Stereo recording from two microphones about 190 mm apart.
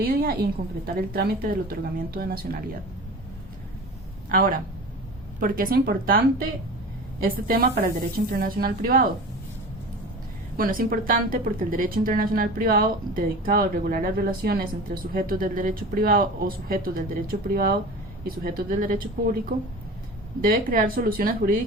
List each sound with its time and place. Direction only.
0.0 s a woman's voice: 50° right (ahead or behind)
4.3 s speech: 45° right (ahead or behind)
7.3 s speech: 50° right (ahead or behind)
10.6 s speech: 50° right (ahead or behind)
20.4 s speech: 50° right (ahead or behind)